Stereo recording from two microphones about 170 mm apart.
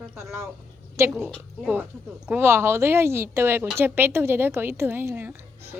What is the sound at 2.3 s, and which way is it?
Speech, 15° right (ahead or behind).